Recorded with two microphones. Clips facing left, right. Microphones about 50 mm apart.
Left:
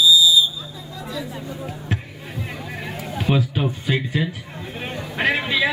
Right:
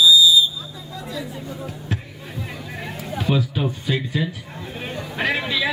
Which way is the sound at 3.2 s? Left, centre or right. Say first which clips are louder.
Left 1 dB; left.